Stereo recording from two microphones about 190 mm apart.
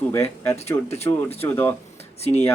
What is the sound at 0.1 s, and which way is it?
Speech, 15° left (ahead or behind).